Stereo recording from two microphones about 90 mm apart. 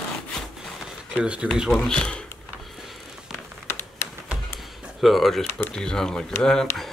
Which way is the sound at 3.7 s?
25° left (ahead or behind).